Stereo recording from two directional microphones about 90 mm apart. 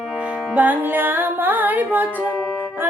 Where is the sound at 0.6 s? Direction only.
20° right (ahead or behind).